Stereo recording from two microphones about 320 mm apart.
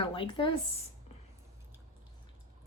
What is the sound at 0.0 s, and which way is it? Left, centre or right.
Speech, centre.